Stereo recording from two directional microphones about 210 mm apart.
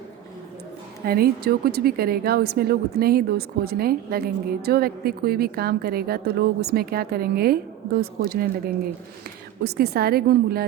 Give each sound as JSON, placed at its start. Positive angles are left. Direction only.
{"t": 1.0, "sound": "a woman's voice", "side_deg": -45}
{"t": 9.6, "sound": "a woman's voice", "side_deg": -50}